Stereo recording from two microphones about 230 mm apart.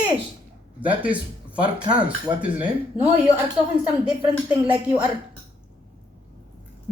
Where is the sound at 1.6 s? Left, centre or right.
Centre.